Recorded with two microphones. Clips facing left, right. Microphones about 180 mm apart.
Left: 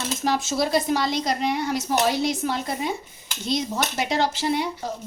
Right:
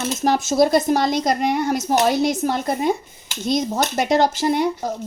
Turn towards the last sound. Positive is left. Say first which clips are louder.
# right 5 dB
turn(degrees=-45)  # may be behind; listen again after turning